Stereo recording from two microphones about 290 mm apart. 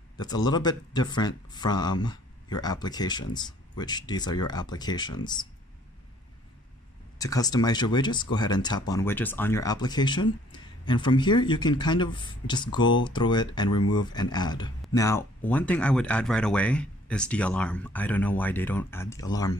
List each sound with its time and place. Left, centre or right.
0.2 s speech: centre
7.2 s speech: centre